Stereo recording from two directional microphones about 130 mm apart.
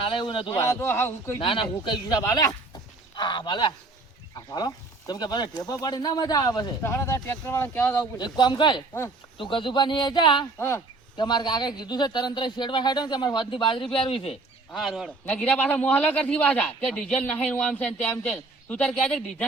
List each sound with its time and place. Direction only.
0.0 s speech: 40° left (ahead or behind)
0.6 s speech: 20° left (ahead or behind)
1.4 s speech: 45° left (ahead or behind); by 8.0 s 15° left (ahead or behind)
8.2 s speech: 35° left (ahead or behind)
8.9 s speech: 20° left (ahead or behind)
9.4 s speech: 40° left (ahead or behind)
10.6 s speech: 20° left (ahead or behind)
11.2 s speech: 35° left (ahead or behind)
14.7 s speech: centre (ahead or behind)
15.3 s speech: 10° left (ahead or behind)